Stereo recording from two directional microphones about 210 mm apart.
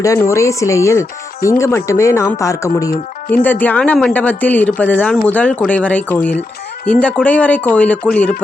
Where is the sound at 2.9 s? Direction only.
45° left (ahead or behind).